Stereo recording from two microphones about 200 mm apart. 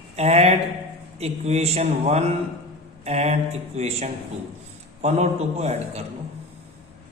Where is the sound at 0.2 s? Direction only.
30° right (ahead or behind).